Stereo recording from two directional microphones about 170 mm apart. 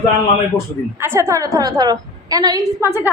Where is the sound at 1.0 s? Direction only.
15° right (ahead or behind).